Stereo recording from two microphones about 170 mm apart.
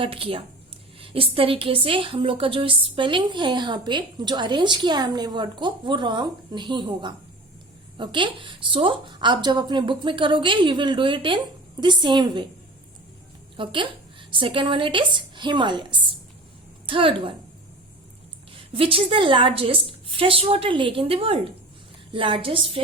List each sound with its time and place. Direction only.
0.0 s a woman's voice: 30° right (ahead or behind)
13.6 s a woman's voice: 30° right (ahead or behind)
18.5 s a woman's voice: 30° right (ahead or behind)